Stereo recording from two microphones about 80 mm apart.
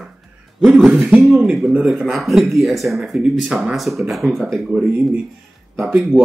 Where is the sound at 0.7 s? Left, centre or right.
Centre.